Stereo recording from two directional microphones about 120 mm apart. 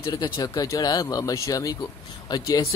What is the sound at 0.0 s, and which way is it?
Speech, 35° left (ahead or behind).